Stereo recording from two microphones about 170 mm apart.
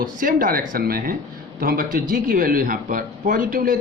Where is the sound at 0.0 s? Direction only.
55° right (ahead or behind).